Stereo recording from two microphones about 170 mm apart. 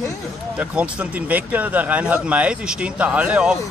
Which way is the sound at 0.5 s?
10° right (ahead or behind).